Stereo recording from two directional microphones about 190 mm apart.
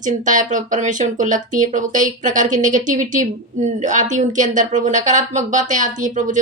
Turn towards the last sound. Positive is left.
turn(degrees=-40)  # may be behind; listen again after turning